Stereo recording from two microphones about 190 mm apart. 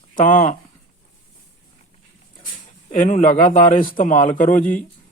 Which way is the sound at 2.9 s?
40° left (ahead or behind).